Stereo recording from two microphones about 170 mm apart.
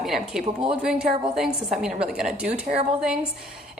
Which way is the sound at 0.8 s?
5° right (ahead or behind).